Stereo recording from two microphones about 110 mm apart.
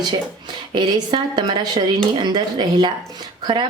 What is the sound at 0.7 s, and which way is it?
Speech, 40° right (ahead or behind).